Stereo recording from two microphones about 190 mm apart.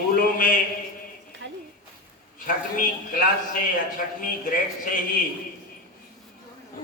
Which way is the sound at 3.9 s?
45° left (ahead or behind).